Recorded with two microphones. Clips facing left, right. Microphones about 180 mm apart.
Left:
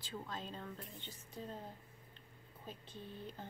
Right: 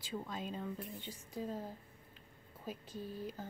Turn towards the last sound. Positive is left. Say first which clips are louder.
# right 6 dB
turn(degrees=-5)  # may be behind; listen again after turning